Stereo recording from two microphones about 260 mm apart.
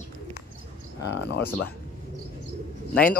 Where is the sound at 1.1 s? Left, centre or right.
Left.